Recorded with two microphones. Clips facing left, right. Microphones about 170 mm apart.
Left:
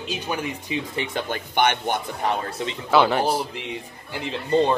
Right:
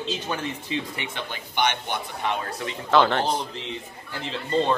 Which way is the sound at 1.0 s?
45° left (ahead or behind).